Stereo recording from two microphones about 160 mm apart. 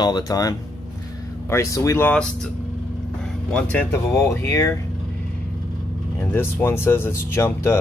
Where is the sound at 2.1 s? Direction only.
5° left (ahead or behind).